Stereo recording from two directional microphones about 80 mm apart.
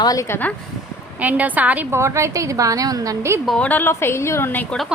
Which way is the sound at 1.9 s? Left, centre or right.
Right.